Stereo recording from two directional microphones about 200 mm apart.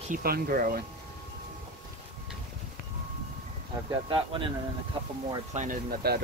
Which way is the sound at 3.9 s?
25° right (ahead or behind).